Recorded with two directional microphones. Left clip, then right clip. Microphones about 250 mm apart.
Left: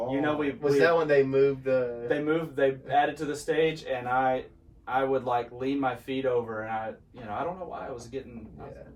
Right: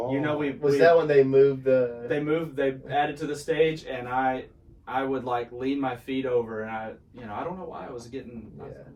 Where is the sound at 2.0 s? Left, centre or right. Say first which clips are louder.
Right 1 dB; centre.